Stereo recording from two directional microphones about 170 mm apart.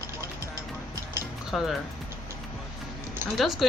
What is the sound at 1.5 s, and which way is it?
Speech, centre (ahead or behind).